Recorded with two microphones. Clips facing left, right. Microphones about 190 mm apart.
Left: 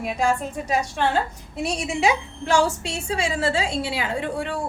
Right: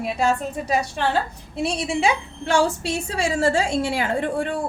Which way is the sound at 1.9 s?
30° right (ahead or behind).